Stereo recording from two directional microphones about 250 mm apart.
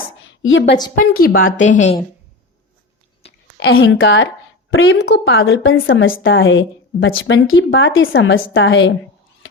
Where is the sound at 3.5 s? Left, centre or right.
Left.